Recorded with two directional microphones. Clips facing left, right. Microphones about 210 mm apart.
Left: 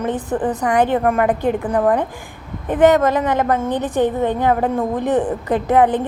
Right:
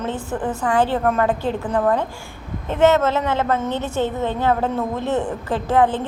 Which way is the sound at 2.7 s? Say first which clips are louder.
Left 3 dB; 15° left (ahead or behind).